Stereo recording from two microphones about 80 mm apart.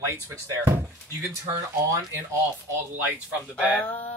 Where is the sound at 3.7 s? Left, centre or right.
Centre.